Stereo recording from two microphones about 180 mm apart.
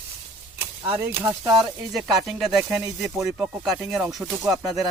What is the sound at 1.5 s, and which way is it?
Speech, centre (ahead or behind).